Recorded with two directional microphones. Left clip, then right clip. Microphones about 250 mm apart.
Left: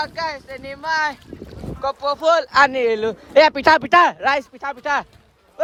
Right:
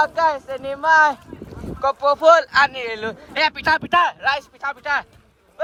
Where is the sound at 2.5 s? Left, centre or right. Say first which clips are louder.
Left 3 dB; left.